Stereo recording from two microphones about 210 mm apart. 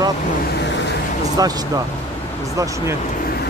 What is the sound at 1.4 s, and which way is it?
Speech, 20° right (ahead or behind).